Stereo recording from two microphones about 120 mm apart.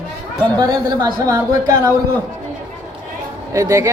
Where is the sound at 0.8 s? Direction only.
35° right (ahead or behind).